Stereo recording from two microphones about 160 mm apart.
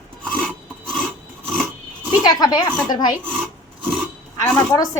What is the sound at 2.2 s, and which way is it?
Speech, 25° left (ahead or behind).